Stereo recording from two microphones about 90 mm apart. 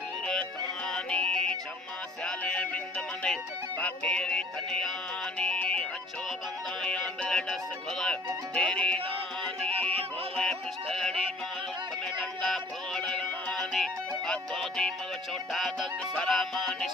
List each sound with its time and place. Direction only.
0.3 s music: 10° left (ahead or behind)
3.8 s music: 15° left (ahead or behind)
9.7 s music: 90° right
10.3 s music: 5° left (ahead or behind)
12.4 s music: 5° left (ahead or behind)